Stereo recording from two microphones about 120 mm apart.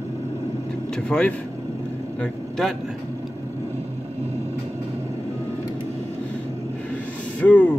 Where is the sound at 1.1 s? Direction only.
10° left (ahead or behind).